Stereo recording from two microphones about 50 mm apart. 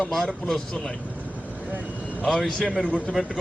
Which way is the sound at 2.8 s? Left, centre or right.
Left.